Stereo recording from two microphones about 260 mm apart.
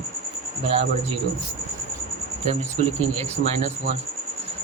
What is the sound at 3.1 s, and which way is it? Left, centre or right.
Speech, right.